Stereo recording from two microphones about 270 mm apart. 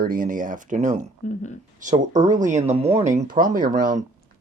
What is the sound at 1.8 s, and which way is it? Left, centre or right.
Speech, right.